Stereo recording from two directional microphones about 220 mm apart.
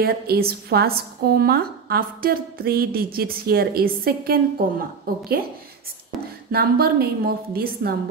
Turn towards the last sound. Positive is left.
turn(degrees=-45)  # may be behind; listen again after turning